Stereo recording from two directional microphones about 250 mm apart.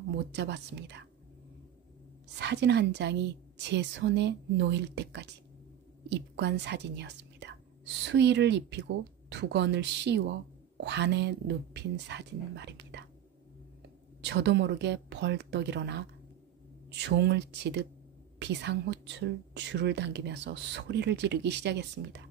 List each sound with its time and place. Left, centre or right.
0.1 s speech: right
2.3 s speech: right
14.2 s speech: right